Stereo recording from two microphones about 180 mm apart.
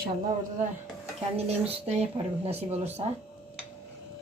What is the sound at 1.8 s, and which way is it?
Speech, 35° right (ahead or behind).